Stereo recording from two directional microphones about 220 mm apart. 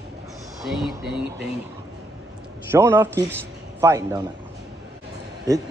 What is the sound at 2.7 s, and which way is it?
A man's voice, 10° right (ahead or behind).